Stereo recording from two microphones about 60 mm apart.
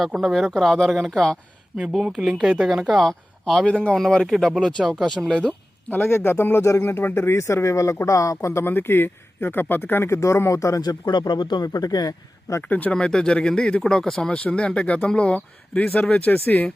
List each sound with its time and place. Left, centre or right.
0.2 s speech: centre
1.7 s speech: centre
3.0 s speech: centre
3.7 s speech: centre
3.9 s speech: centre
6.1 s speech: left
8.6 s speech: left
10.1 s speech: left
11.6 s speech: left
12.6 s speech: left
12.9 s speech: centre; by 16.6 s left